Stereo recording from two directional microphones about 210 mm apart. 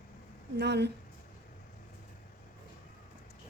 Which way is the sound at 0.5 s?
55° right (ahead or behind).